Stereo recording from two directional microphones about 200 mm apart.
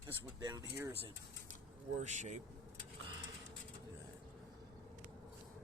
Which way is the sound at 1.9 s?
35° right (ahead or behind).